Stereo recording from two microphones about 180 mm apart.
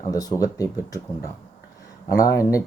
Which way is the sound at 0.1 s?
20° left (ahead or behind).